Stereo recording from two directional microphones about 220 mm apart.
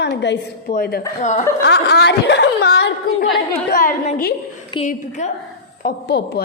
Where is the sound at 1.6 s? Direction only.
50° left (ahead or behind).